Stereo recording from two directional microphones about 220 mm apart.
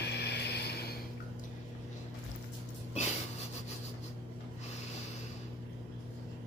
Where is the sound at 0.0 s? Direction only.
50° left (ahead or behind).